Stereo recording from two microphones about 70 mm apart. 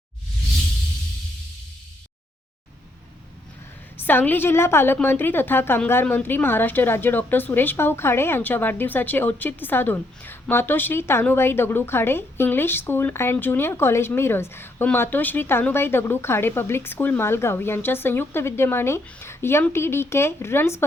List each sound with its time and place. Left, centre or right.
3.9 s a woman's voice: left